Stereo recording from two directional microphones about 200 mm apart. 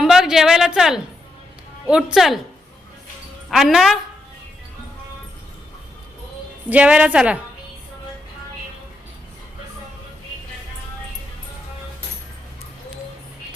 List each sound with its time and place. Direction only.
0.0 s speech: centre (ahead or behind)
3.5 s speech: centre (ahead or behind)
6.7 s a woman's voice: 5° right (ahead or behind)